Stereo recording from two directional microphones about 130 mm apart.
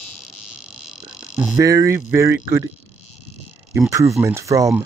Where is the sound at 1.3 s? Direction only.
10° right (ahead or behind).